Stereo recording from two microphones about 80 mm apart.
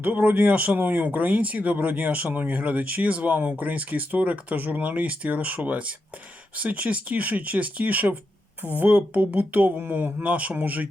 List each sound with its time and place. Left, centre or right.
0.0 s speech: right